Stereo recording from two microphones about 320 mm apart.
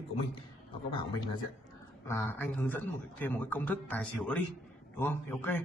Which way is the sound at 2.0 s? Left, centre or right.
Centre.